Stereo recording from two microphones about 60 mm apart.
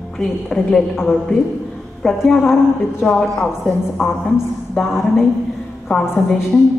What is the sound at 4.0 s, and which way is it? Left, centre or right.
A woman's voice, centre.